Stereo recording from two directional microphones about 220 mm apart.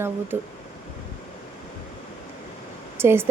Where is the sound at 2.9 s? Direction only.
10° right (ahead or behind).